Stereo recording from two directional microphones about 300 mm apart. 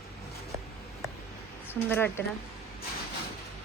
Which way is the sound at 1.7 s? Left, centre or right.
Centre.